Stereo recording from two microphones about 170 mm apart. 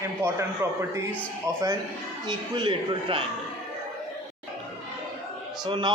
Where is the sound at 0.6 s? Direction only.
15° right (ahead or behind); by 3.2 s 30° right (ahead or behind).